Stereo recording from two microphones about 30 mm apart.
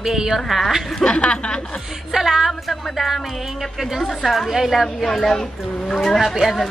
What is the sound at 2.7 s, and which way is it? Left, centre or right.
Speech, centre.